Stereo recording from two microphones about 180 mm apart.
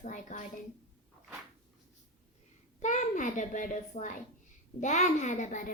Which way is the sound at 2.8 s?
45° left (ahead or behind).